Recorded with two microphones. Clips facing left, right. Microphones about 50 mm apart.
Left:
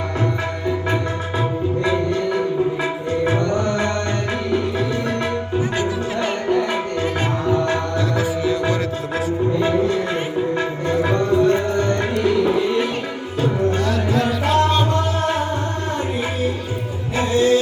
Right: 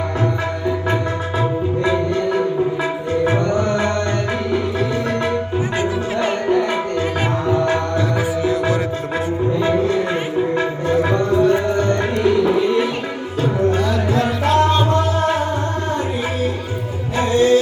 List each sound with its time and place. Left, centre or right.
3.5 s music: centre
6.2 s music: centre
13.8 s music: right
14.5 s music: centre
17.2 s music: centre